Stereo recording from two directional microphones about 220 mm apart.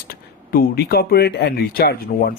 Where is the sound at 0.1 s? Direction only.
40° left (ahead or behind).